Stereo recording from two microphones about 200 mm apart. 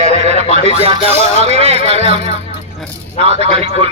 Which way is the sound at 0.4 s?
30° left (ahead or behind).